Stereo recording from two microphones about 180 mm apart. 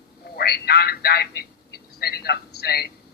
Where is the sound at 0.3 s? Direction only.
60° left (ahead or behind).